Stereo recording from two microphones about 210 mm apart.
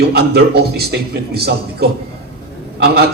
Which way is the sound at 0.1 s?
50° right (ahead or behind).